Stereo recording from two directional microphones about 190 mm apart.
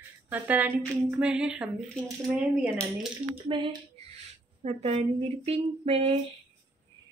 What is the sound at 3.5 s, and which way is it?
Speech, 25° right (ahead or behind).